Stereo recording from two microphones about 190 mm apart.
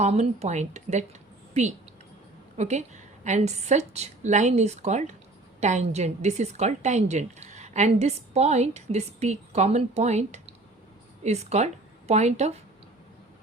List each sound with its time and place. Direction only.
0.0 s a woman's voice: 35° right (ahead or behind)
2.6 s a woman's voice: 35° right (ahead or behind)